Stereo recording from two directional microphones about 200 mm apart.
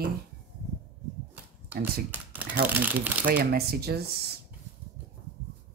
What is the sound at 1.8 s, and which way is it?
Speech, 10° right (ahead or behind).